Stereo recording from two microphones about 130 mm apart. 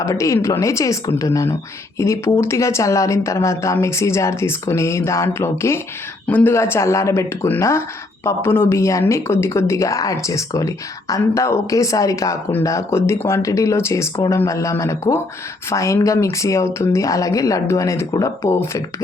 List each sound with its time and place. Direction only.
0.0 s speech: 25° left (ahead or behind)